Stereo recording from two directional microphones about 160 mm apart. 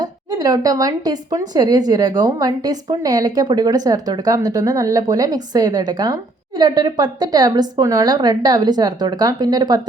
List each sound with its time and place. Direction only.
0.0 s a woman's voice: 25° right (ahead or behind)